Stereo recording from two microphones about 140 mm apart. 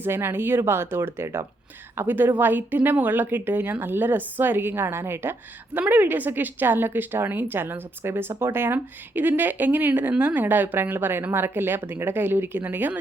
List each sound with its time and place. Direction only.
0.0 s speech: 15° right (ahead or behind)